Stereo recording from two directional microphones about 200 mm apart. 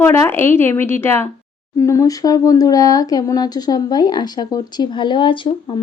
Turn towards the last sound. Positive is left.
turn(degrees=25)  # may be behind; listen again after turning